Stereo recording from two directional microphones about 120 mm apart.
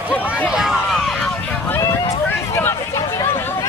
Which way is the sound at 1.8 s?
25° left (ahead or behind).